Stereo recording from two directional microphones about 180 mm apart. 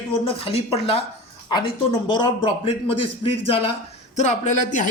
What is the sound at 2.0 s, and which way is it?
A man's voice, 25° left (ahead or behind).